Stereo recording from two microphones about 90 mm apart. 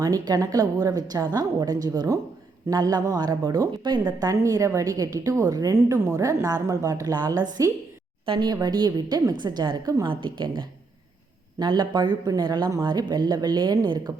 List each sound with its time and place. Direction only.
0.0 s a woman's voice: 40° right (ahead or behind)
8.3 s speech: 70° right (ahead or behind)
8.6 s speech: 50° right (ahead or behind)
10.1 s a woman's voice: 65° right (ahead or behind)